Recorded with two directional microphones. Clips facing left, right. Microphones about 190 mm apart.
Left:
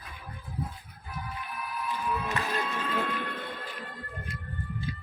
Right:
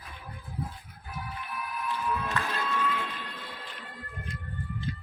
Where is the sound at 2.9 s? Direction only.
55° left (ahead or behind).